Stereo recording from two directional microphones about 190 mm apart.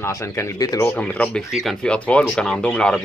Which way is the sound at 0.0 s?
15° left (ahead or behind).